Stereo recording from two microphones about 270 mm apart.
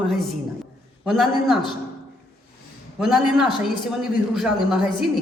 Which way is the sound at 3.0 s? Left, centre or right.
Centre.